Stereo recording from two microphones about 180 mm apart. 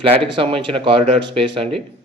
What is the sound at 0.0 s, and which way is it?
Speech, 30° right (ahead or behind).